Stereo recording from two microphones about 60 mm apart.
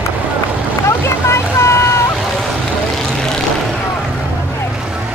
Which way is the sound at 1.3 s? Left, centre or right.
Left.